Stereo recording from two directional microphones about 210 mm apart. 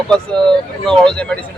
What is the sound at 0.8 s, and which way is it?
Speech, 5° left (ahead or behind).